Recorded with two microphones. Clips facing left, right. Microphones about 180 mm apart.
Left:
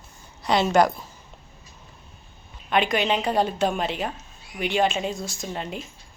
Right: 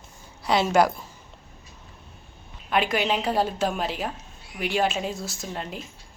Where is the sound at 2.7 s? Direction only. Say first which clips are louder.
Left 1 dB; 5° right (ahead or behind).